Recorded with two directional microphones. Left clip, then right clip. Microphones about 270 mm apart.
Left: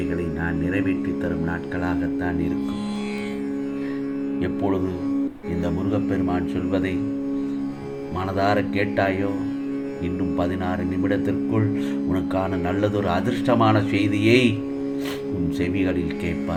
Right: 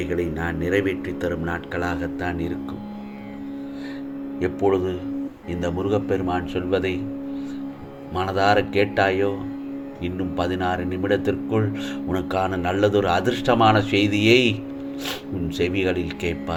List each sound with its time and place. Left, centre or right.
0.6 s a man's voice: right
5.6 s a man's voice: right
8.4 s a man's voice: right
10.3 s a man's voice: right
15.5 s a man's voice: right